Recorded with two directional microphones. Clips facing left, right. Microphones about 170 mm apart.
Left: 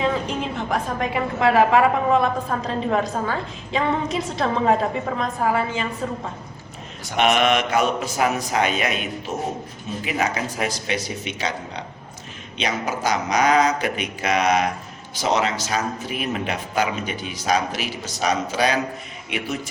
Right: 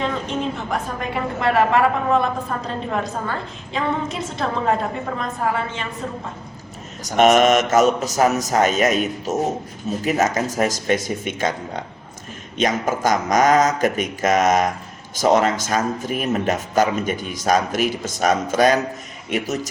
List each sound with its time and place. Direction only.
0.0 s a woman's voice: centre (ahead or behind)
7.0 s speech: 40° right (ahead or behind)